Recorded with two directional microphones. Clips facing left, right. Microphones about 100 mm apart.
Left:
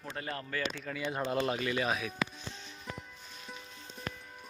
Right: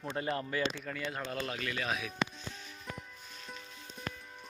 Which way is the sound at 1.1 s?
20° left (ahead or behind).